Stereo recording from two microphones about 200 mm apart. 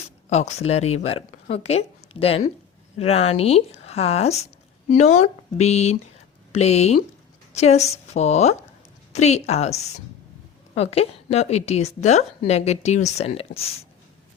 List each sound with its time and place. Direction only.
0.3 s a woman's voice: 35° left (ahead or behind)